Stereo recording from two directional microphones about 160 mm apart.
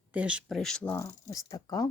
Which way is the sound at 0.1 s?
10° right (ahead or behind).